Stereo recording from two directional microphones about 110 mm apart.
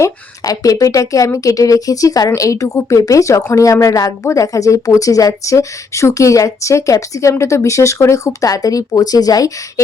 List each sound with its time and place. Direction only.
0.0 s speech: 30° left (ahead or behind)